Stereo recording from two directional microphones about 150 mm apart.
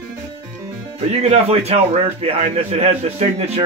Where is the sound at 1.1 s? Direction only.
45° right (ahead or behind).